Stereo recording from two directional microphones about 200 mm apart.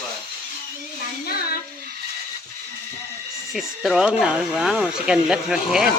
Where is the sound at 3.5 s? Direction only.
Centre (ahead or behind).